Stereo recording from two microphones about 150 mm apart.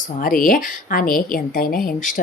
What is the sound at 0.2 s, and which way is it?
A woman's voice, 70° left (ahead or behind).